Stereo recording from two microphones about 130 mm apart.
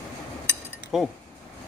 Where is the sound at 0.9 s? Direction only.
Centre (ahead or behind).